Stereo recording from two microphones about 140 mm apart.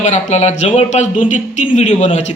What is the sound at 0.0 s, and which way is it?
Speech, 55° left (ahead or behind).